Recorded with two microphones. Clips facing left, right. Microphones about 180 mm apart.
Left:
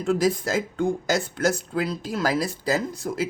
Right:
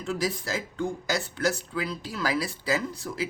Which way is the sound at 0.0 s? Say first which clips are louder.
Left 7 dB; 50° left (ahead or behind).